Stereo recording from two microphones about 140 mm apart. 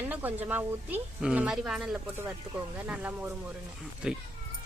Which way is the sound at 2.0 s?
15° right (ahead or behind).